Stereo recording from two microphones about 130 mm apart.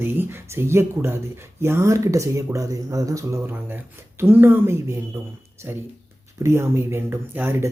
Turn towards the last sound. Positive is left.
turn(degrees=-15)  # may be behind; listen again after turning